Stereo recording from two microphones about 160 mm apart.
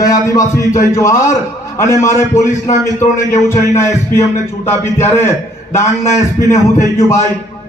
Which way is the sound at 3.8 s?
15° left (ahead or behind).